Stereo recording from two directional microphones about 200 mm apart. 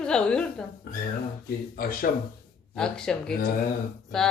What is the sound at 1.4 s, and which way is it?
Speech, 45° left (ahead or behind).